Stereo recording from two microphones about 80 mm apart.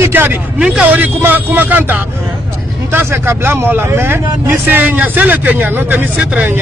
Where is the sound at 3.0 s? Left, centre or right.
Right.